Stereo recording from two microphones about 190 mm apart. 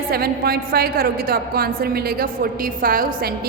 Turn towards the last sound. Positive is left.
turn(degrees=-50)  # may be behind; listen again after turning